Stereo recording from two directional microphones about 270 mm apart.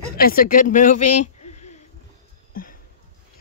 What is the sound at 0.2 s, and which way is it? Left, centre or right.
Speech, left.